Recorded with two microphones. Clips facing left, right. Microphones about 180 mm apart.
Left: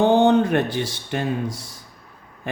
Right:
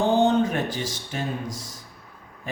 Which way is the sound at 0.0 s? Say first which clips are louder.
Left 4 dB; 60° left (ahead or behind).